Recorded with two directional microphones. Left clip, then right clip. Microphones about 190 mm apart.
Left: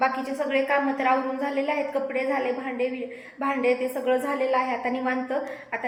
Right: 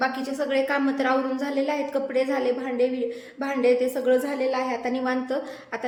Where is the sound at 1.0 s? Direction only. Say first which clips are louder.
Even; 25° right (ahead or behind).